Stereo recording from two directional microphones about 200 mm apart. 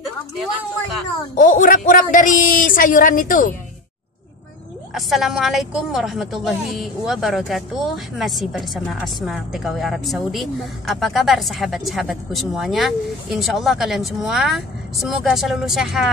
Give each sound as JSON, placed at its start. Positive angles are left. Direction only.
{"t": 1.4, "sound": "a man's voice", "side_deg": 40}
{"t": 4.9, "sound": "a woman's voice", "side_deg": 0}